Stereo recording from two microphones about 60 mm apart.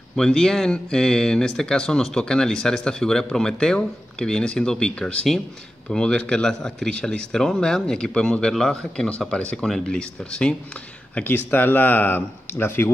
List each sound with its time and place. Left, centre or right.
0.1 s speech: centre
11.2 s speech: left